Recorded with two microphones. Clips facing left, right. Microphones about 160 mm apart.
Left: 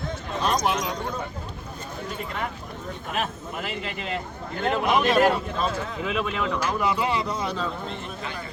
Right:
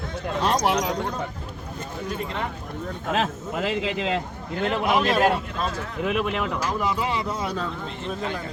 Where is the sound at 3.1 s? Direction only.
90° right.